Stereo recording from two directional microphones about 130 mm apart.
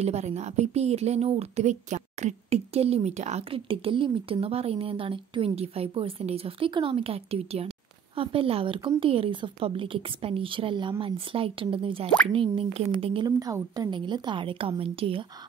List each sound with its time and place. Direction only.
0.0 s a woman's voice: 60° right (ahead or behind)
3.4 s speech: 45° right (ahead or behind)
13.4 s a woman's voice: 30° right (ahead or behind); by 15.2 s 45° right (ahead or behind)